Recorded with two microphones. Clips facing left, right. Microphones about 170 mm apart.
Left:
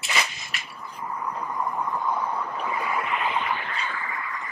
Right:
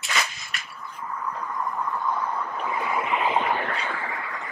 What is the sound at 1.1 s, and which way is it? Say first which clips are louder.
Vehicle: left 1 dB; 15° left (ahead or behind).